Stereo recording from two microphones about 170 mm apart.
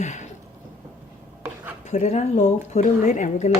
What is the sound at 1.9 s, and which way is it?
Speech, 40° left (ahead or behind).